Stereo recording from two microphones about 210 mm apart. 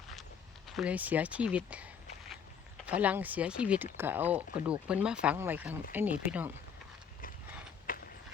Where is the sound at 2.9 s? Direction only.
5° right (ahead or behind).